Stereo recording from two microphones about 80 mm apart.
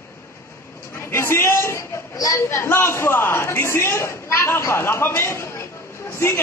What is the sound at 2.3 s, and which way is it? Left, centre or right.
A man's voice, left.